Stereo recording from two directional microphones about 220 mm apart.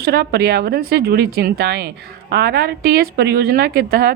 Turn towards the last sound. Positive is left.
turn(degrees=-40)  # may be behind; listen again after turning